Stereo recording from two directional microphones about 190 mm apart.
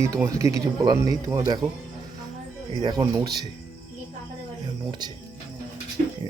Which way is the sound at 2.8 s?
20° right (ahead or behind).